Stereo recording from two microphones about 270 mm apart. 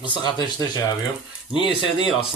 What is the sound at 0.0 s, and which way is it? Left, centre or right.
Speech, centre.